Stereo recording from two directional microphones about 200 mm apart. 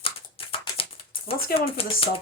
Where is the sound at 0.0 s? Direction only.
25° left (ahead or behind).